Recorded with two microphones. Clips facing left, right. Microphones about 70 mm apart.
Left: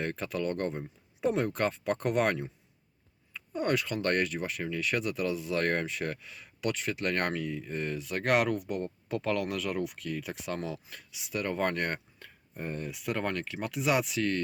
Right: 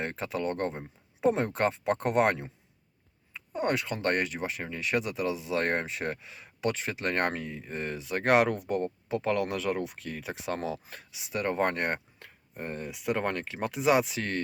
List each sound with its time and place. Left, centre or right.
0.0 s speech: right